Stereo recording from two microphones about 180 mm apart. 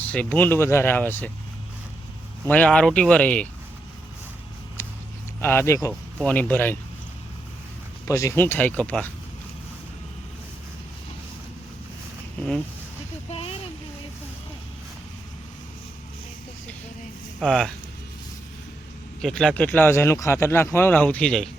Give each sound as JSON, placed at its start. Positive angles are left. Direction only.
{"t": 0.0, "sound": "speech", "side_deg": 10}
{"t": 2.5, "sound": "speech", "side_deg": 5}
{"t": 4.8, "sound": "a sound", "side_deg": 15}
{"t": 5.4, "sound": "speech", "side_deg": 15}
{"t": 5.9, "sound": "speech", "side_deg": 5}
{"t": 8.0, "sound": "speech", "side_deg": 15}
{"t": 13.3, "sound": "a sound", "side_deg": 35}
{"t": 17.4, "sound": "speech", "side_deg": 0}
{"t": 19.2, "sound": "speech", "side_deg": 5}